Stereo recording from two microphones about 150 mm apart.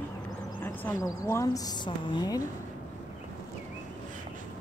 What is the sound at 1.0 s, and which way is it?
Speech, 25° left (ahead or behind).